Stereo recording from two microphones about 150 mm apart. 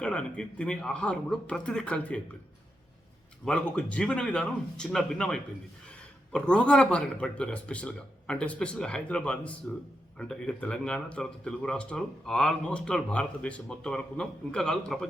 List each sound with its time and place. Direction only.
0.0 s a man's voice: 5° left (ahead or behind)
3.4 s a man's voice: 5° left (ahead or behind)